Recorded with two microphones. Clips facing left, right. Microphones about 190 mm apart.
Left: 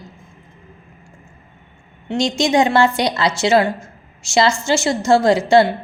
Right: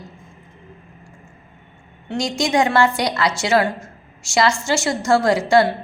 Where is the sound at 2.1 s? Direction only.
25° left (ahead or behind).